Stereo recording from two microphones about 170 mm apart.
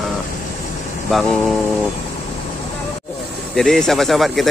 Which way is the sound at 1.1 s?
Centre (ahead or behind).